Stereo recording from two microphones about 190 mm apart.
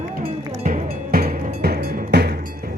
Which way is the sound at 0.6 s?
45° right (ahead or behind).